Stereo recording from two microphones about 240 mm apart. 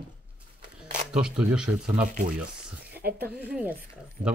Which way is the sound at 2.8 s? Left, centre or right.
Right.